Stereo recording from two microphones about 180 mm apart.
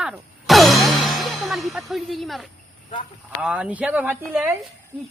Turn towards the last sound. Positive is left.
turn(degrees=-10)  # may be behind; listen again after turning